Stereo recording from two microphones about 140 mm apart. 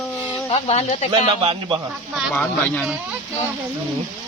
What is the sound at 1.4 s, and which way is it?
Speech, 40° right (ahead or behind).